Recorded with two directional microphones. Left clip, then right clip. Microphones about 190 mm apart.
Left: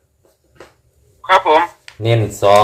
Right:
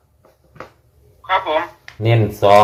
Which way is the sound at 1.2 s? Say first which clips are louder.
Left 7 dB; 35° left (ahead or behind).